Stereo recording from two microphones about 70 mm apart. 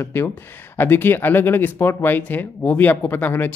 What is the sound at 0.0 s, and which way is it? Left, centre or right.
Speech, left.